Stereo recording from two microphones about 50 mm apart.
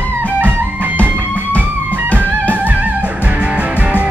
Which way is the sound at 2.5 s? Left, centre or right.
Right.